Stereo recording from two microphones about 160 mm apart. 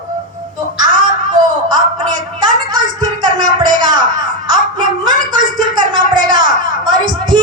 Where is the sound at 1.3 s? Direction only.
25° right (ahead or behind).